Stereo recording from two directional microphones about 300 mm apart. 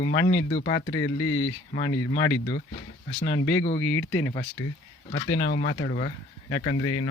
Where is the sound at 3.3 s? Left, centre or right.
Left.